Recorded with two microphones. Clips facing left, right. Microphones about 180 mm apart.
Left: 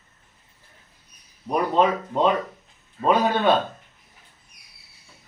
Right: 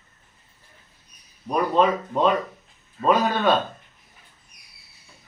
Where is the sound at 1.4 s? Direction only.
20° left (ahead or behind).